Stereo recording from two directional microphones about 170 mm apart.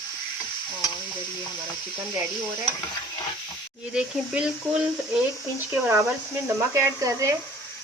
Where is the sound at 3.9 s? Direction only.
5° right (ahead or behind).